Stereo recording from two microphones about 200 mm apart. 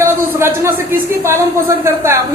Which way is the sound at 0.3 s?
15° right (ahead or behind).